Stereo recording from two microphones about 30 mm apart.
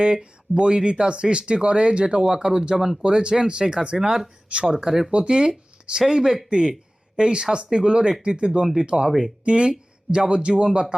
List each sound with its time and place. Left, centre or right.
0.0 s speech: right
2.2 s speech: right
6.1 s speech: centre
6.5 s speech: right
8.6 s speech: centre
9.5 s speech: right